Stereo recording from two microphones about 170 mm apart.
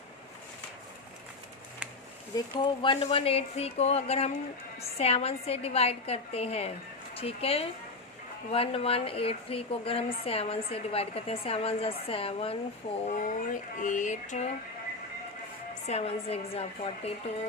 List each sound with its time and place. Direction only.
2.3 s a woman's voice: 25° left (ahead or behind)
13.1 s a sound: 50° left (ahead or behind)
15.9 s a woman's voice: 35° left (ahead or behind)